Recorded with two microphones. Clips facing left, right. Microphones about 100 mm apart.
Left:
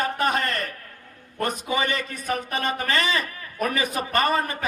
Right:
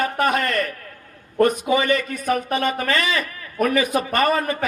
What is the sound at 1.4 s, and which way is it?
Speech, 30° right (ahead or behind).